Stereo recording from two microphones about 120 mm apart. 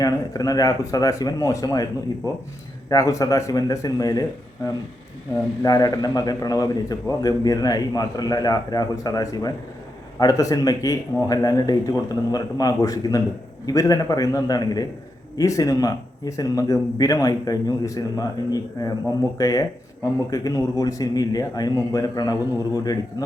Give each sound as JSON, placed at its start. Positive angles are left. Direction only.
{"t": 0.0, "sound": "a man's voice", "side_deg": 30}